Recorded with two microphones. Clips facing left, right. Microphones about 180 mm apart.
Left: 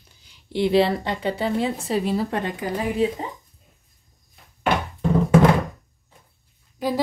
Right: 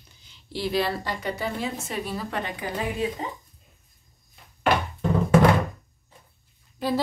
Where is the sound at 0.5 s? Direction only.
25° left (ahead or behind).